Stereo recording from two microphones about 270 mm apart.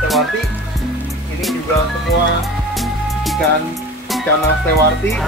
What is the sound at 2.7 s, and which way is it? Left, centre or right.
Music, centre.